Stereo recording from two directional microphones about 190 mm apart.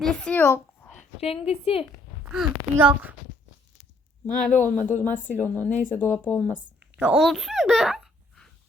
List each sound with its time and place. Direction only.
0.0 s a sound: 5° left (ahead or behind)
0.9 s a woman's voice: 30° left (ahead or behind)
2.3 s speech: 5° right (ahead or behind)
4.4 s speech: 10° left (ahead or behind)
6.9 s speech: 5° right (ahead or behind)